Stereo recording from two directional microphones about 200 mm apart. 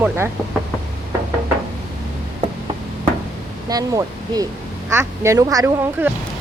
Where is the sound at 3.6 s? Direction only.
20° right (ahead or behind).